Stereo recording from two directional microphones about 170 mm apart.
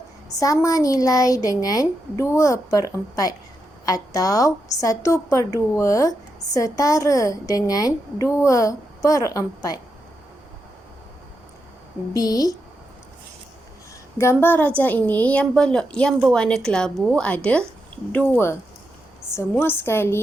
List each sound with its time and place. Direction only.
0.3 s a woman's voice: 20° left (ahead or behind)
3.8 s a woman's voice: 20° left (ahead or behind)
12.1 s a woman's voice: 20° left (ahead or behind)
14.2 s a woman's voice: 15° left (ahead or behind)